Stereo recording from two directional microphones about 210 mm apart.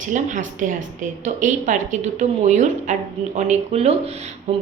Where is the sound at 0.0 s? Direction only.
35° right (ahead or behind).